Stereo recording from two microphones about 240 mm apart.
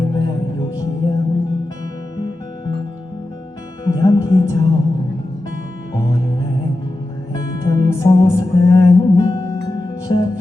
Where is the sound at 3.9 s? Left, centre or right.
Centre.